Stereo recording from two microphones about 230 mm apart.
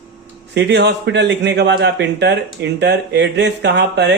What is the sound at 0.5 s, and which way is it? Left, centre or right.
Speech, right.